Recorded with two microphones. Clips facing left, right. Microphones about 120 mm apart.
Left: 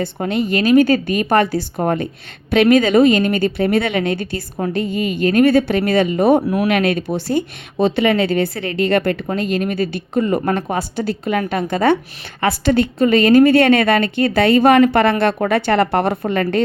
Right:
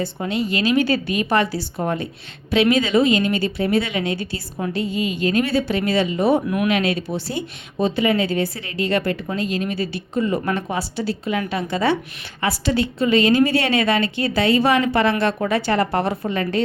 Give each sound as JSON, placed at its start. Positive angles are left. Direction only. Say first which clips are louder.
{"t": 0.0, "sound": "a woman's voice", "louder": "left 4 dB", "side_deg": 55}
{"t": 7.8, "sound": "a woman's voice", "louder": "left 4 dB", "side_deg": 70}